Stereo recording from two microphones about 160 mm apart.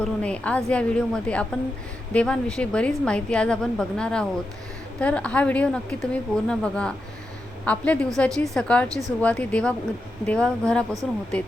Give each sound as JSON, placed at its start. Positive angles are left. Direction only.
{"t": 0.0, "sound": "a woman's voice", "side_deg": 5}
{"t": 8.9, "sound": "speech", "side_deg": -20}
{"t": 9.2, "sound": "a woman's voice", "side_deg": 10}